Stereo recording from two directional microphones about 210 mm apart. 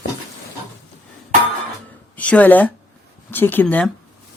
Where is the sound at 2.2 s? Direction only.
5° left (ahead or behind).